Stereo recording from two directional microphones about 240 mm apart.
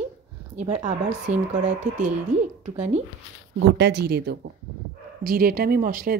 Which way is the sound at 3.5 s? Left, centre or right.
Right.